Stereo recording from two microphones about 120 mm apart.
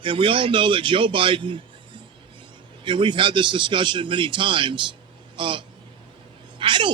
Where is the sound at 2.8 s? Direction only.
40° right (ahead or behind).